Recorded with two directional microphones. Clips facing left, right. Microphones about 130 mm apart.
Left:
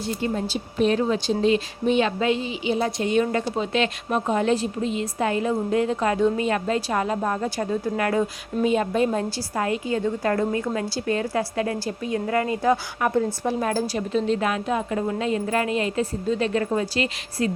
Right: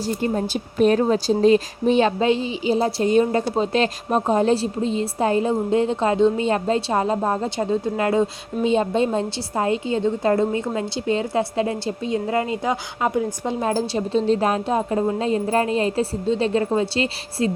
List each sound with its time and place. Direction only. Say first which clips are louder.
0.0 s a woman's voice: right 3 dB; 40° right (ahead or behind)